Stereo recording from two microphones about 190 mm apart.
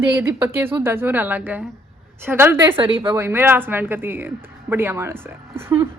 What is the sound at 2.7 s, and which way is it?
Speech, 30° right (ahead or behind).